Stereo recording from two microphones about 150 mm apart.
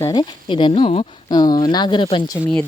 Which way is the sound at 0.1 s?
35° left (ahead or behind).